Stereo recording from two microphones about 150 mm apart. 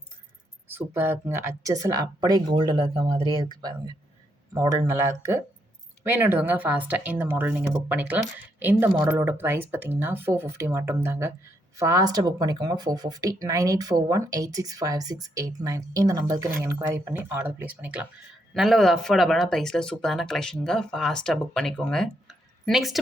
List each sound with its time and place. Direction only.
0.7 s speech: 15° right (ahead or behind)
18.5 s speech: centre (ahead or behind)